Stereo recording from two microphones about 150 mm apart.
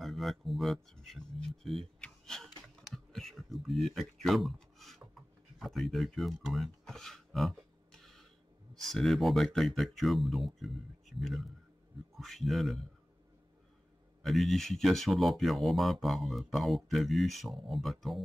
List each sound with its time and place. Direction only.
0.0 s speech: centre (ahead or behind)
14.2 s speech: centre (ahead or behind)